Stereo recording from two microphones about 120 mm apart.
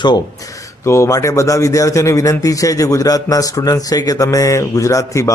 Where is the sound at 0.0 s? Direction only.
35° left (ahead or behind).